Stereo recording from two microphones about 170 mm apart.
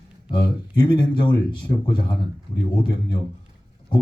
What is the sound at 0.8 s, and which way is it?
Speech, 30° left (ahead or behind).